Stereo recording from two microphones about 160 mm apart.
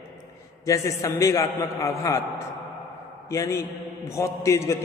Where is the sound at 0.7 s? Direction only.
20° left (ahead or behind).